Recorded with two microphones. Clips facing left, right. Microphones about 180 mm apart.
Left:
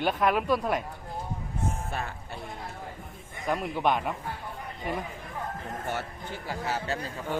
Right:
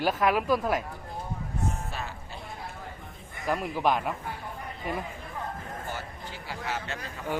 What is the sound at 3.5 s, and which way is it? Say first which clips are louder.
Speech: even; centre (ahead or behind).